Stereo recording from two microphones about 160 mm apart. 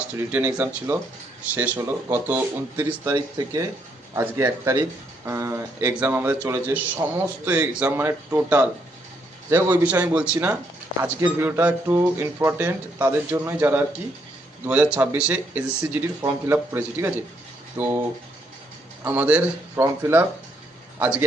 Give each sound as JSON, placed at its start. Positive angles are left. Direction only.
{"t": 0.3, "sound": "speech", "side_deg": -10}
{"t": 9.6, "sound": "speech", "side_deg": -10}
{"t": 14.9, "sound": "speech", "side_deg": -10}
{"t": 19.0, "sound": "speech", "side_deg": -10}